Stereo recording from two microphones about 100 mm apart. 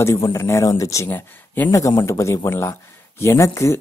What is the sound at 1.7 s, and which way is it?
Speech, 35° left (ahead or behind).